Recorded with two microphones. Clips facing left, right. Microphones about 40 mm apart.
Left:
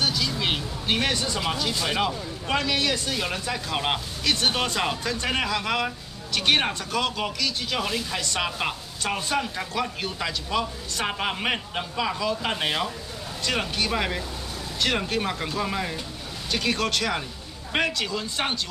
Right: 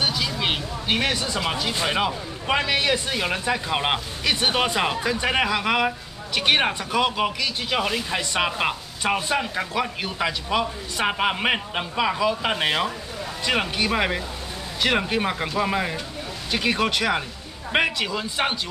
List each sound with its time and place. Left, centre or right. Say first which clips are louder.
0.0 s vehicle: right 1 dB; centre
1.5 s speech: right 3 dB; right